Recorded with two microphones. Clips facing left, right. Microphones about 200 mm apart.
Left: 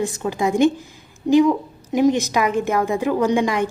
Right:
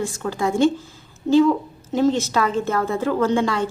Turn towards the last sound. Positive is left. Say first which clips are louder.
# left 1 dB
turn(degrees=15)  # may be behind; listen again after turning